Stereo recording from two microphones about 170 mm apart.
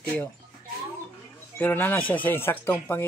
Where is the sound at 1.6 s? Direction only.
10° left (ahead or behind).